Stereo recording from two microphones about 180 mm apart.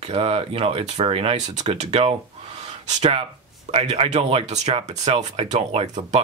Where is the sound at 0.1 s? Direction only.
35° right (ahead or behind).